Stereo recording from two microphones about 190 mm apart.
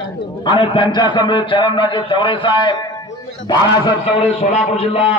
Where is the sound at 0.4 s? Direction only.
25° left (ahead or behind).